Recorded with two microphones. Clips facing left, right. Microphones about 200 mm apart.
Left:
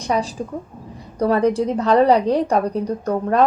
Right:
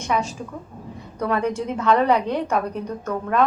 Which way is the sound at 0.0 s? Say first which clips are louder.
Left 3 dB; 35° left (ahead or behind).